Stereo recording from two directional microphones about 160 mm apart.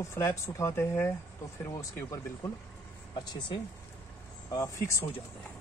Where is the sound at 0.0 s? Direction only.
15° left (ahead or behind).